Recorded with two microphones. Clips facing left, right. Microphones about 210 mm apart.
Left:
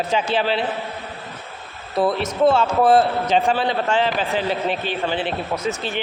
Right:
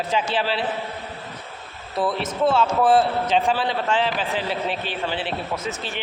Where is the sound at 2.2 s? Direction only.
Centre (ahead or behind).